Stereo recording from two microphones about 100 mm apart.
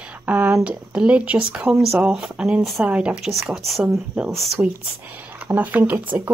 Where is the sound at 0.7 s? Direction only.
10° right (ahead or behind).